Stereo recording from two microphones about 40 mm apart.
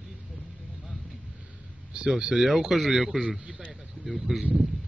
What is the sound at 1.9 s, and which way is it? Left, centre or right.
Speech, right.